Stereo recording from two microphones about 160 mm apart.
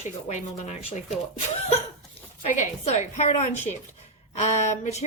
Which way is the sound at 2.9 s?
45° left (ahead or behind).